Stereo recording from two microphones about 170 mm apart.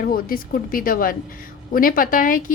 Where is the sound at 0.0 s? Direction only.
60° left (ahead or behind).